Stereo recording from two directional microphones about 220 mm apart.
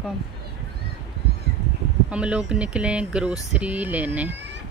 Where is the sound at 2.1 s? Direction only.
5° right (ahead or behind).